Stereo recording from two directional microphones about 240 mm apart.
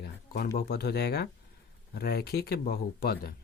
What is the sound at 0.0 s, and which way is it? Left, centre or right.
Speech, left.